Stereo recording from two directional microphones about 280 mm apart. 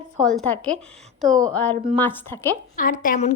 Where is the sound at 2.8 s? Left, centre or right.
Left.